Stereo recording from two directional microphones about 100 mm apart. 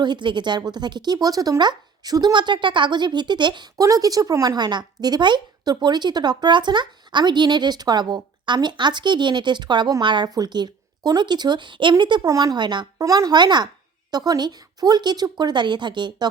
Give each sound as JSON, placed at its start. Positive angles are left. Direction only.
{"t": 0.0, "sound": "a woman's voice", "side_deg": -50}
{"t": 3.8, "sound": "a woman's voice", "side_deg": -35}
{"t": 12.3, "sound": "speech", "side_deg": -35}
{"t": 12.5, "sound": "a woman's voice", "side_deg": -50}